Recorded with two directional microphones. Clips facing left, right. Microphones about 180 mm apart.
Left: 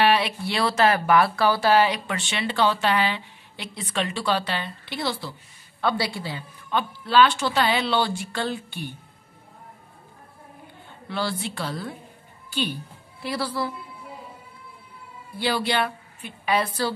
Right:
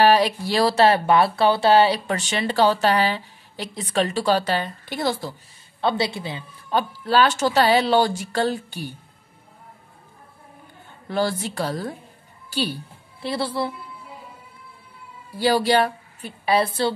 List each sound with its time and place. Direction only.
0.0 s speech: 40° right (ahead or behind)
5.8 s speech: 25° right (ahead or behind)
6.7 s speech: 40° right (ahead or behind)
11.1 s a woman's voice: 45° right (ahead or behind); by 13.7 s 25° right (ahead or behind)
15.3 s a woman's voice: 40° right (ahead or behind)